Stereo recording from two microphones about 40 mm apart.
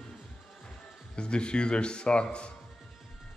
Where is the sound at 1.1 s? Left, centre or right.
Left.